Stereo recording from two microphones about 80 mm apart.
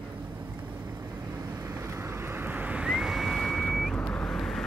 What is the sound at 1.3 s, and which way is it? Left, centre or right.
Vehicle, right.